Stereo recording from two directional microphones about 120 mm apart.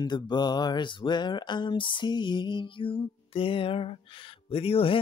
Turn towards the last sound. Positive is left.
turn(degrees=55)  # may be behind; listen again after turning